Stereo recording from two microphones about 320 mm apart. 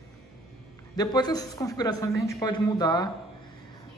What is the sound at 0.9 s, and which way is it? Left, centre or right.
Speech, centre.